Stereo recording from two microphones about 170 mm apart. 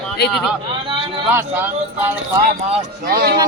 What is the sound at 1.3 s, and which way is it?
Speech, 10° right (ahead or behind).